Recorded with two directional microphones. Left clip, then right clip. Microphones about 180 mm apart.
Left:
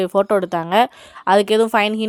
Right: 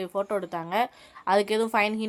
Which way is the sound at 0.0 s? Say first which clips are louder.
Left 12 dB; 50° left (ahead or behind).